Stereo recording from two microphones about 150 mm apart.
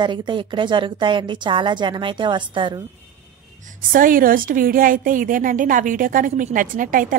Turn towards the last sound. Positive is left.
turn(degrees=-65)  # may be behind; listen again after turning